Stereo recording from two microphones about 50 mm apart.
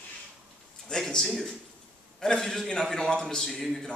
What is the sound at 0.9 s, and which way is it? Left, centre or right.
A man's voice, centre.